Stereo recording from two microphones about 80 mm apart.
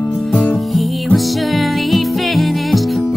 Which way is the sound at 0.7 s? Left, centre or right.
Centre.